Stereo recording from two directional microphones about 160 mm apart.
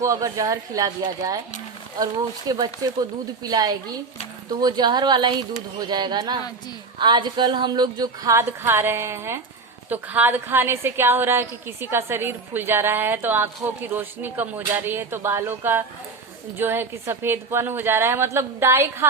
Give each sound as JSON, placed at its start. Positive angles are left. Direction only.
{"t": 0.0, "sound": "speech", "side_deg": -20}
{"t": 2.5, "sound": "a woman's voice", "side_deg": -25}